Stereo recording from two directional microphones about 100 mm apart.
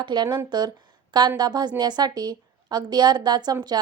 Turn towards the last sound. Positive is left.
turn(degrees=-45)  # may be behind; listen again after turning